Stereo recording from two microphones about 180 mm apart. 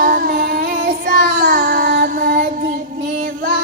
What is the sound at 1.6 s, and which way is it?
Child singing, 50° right (ahead or behind).